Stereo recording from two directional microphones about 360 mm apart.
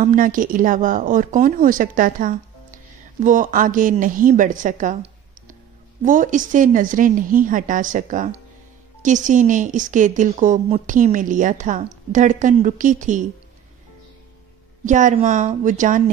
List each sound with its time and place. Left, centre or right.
0.0 s a woman's voice: right
14.9 s a woman's voice: right